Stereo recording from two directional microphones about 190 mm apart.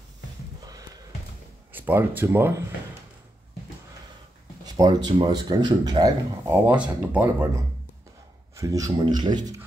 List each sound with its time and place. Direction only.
1.7 s speech: 10° right (ahead or behind)
4.6 s speech: 20° right (ahead or behind)
6.4 s speech: 10° right (ahead or behind)